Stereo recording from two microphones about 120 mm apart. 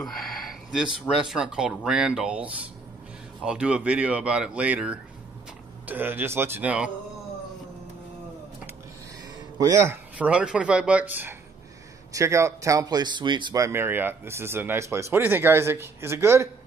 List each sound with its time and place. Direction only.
0.0 s speech: centre (ahead or behind)
9.6 s speech: 25° right (ahead or behind)
10.1 s speech: 10° right (ahead or behind); by 13.6 s 40° right (ahead or behind)
13.6 s speech: 20° right (ahead or behind)